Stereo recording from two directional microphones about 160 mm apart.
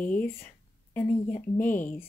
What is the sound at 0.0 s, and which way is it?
Speech, 10° left (ahead or behind).